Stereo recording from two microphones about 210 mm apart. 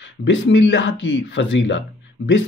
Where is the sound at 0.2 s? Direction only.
60° left (ahead or behind).